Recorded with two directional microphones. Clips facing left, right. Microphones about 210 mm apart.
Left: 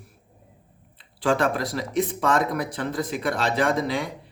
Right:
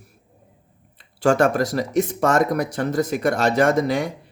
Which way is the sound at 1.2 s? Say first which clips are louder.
Right 5 dB; 45° right (ahead or behind).